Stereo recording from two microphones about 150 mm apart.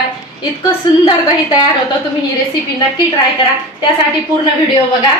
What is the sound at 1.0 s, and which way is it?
Speech, 30° left (ahead or behind).